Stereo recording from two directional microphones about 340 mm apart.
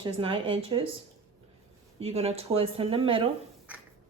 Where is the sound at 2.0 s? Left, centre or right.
Centre.